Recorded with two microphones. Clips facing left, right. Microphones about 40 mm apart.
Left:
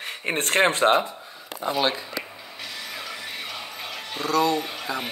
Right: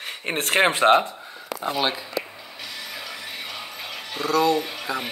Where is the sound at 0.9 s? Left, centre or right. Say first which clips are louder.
Right 3 dB; right.